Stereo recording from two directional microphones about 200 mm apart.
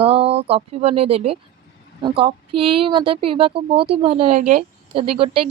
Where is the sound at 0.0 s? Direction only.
30° right (ahead or behind).